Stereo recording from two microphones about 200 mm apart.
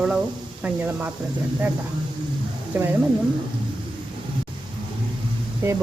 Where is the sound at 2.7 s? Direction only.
10° right (ahead or behind).